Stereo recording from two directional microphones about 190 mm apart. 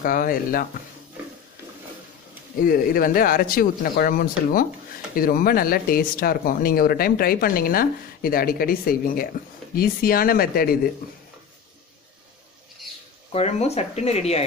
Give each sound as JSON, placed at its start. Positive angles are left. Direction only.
{"t": 0.0, "sound": "speech", "side_deg": 50}
{"t": 2.6, "sound": "speech", "side_deg": 50}
{"t": 13.3, "sound": "speech", "side_deg": 35}